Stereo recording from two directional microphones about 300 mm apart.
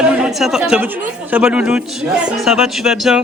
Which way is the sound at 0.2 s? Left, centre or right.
Centre.